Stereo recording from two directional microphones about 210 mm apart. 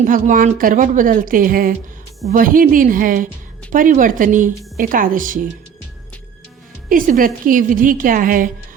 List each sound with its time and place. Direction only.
0.0 s speech: 40° right (ahead or behind)
6.8 s speech: 40° right (ahead or behind)